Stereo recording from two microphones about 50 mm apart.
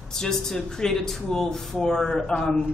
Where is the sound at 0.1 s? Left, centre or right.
Centre.